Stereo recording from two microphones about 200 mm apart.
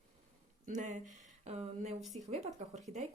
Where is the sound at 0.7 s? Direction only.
35° right (ahead or behind).